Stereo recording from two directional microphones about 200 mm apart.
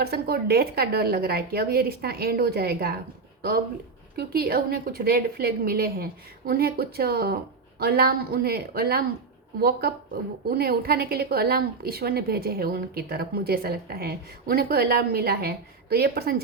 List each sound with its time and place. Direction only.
0.0 s a woman's voice: 50° right (ahead or behind)
4.2 s a woman's voice: 50° right (ahead or behind)